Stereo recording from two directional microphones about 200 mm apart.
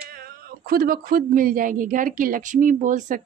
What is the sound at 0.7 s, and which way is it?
A woman's voice, 45° right (ahead or behind).